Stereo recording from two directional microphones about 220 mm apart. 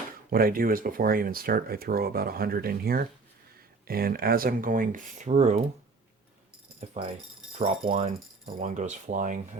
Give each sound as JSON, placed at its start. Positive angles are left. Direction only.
{"t": 0.3, "sound": "speech", "side_deg": -40}
{"t": 6.7, "sound": "speech", "side_deg": -30}